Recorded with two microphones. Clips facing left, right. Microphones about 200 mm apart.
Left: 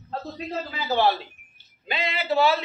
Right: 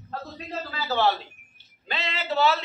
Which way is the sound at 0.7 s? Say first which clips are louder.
Left 1 dB; 15° left (ahead or behind).